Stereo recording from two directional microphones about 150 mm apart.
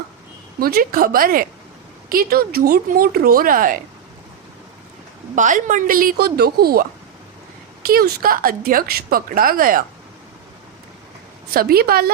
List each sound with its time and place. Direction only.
0.6 s a woman's voice: 75° right (ahead or behind)
5.3 s a woman's voice: 60° right (ahead or behind)
11.5 s a woman's voice: 90° right